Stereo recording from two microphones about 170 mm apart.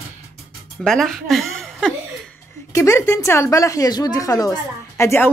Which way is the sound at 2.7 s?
15° left (ahead or behind).